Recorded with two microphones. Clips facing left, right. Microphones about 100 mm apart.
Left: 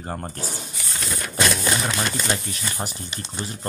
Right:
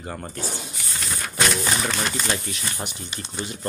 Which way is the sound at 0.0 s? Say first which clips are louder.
Left 2 dB; 35° left (ahead or behind).